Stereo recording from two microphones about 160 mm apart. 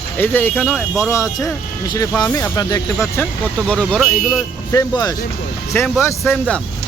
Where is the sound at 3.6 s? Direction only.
5° left (ahead or behind).